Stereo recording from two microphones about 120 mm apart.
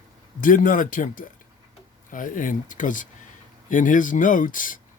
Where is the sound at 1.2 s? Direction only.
90° left.